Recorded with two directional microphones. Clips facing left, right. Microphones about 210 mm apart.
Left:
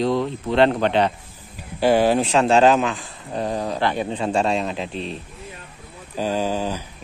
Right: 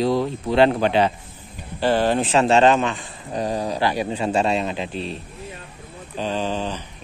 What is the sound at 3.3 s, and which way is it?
Speech, 20° right (ahead or behind).